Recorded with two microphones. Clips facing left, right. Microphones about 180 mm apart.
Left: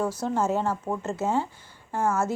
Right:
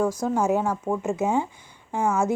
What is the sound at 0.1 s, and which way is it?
A woman's voice, 10° right (ahead or behind).